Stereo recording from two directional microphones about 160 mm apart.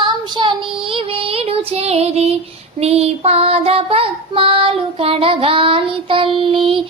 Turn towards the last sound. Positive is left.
turn(degrees=-30)  # may be behind; listen again after turning